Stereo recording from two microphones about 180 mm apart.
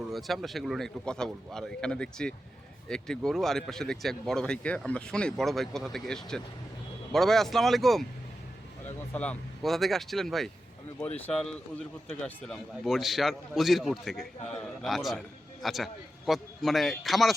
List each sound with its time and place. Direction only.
0.1 s speech: centre (ahead or behind)
9.1 s speech: 5° left (ahead or behind)